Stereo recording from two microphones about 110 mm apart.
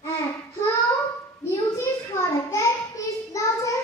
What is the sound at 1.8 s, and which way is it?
Child singing, 25° left (ahead or behind).